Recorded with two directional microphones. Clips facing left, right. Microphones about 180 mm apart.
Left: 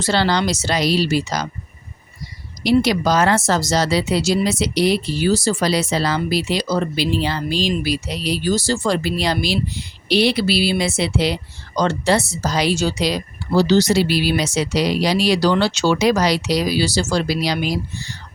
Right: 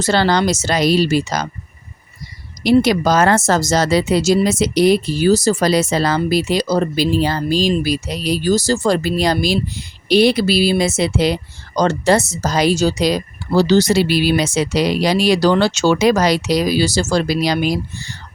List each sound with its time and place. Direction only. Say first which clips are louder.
0.0 s speech: right 3 dB; 50° right (ahead or behind)
2.6 s speech: right 3 dB; 50° right (ahead or behind)